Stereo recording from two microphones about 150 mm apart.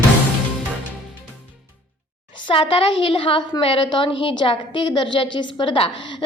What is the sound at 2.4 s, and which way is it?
A woman's voice, 35° left (ahead or behind).